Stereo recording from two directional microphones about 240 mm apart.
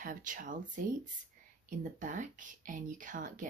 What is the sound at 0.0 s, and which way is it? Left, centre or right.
Speech, right.